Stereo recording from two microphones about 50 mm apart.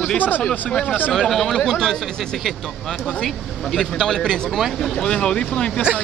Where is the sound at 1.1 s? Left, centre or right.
Centre.